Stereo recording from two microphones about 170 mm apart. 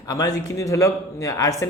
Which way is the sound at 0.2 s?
20° left (ahead or behind).